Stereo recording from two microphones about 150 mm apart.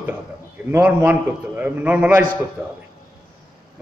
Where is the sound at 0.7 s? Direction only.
15° right (ahead or behind).